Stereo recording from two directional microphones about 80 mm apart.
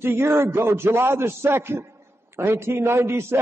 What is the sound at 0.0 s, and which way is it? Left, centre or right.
A man's voice, right.